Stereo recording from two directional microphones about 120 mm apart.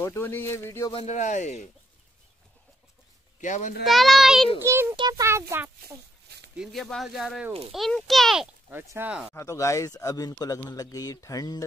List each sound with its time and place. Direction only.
0.0 s a man's voice: 20° left (ahead or behind)
1.0 s speech: 85° left
3.3 s speech: 90° left
3.8 s speech: centre (ahead or behind)
4.6 s a child's voice: 20° right (ahead or behind)
4.9 s a child's voice: 40° right (ahead or behind)
5.2 s a child's voice: 20° right (ahead or behind)
6.5 s speech: centre (ahead or behind)
8.9 s speech: 15° right (ahead or behind)
9.3 s a man's voice: 25° left (ahead or behind)